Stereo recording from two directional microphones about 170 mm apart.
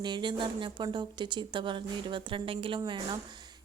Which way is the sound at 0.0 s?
25° right (ahead or behind).